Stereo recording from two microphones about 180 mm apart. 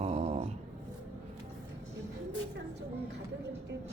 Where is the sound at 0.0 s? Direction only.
35° right (ahead or behind).